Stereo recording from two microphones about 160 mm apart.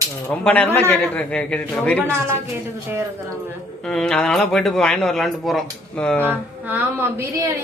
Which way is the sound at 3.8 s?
5° left (ahead or behind).